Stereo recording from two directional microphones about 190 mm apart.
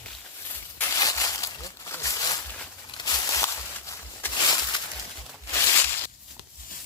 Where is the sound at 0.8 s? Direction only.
15° left (ahead or behind).